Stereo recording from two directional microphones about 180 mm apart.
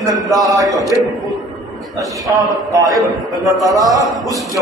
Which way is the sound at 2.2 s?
20° right (ahead or behind).